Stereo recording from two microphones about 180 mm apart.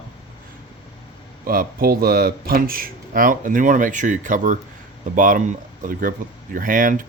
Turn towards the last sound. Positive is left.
turn(degrees=-50)  # may be behind; listen again after turning